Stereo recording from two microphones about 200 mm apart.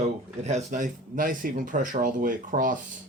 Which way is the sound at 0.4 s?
35° right (ahead or behind).